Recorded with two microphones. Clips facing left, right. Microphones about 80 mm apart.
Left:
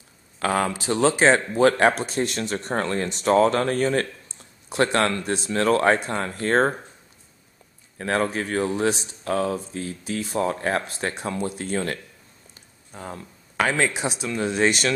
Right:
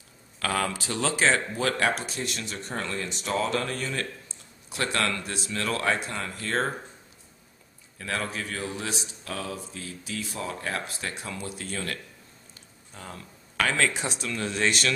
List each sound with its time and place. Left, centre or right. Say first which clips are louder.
0.4 s speech: left 5 dB; left
8.0 s speech: left 8 dB; left; by 14.9 s centre